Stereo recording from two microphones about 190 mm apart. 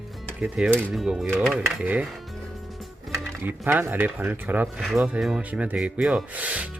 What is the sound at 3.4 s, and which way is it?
Speech, 10° right (ahead or behind).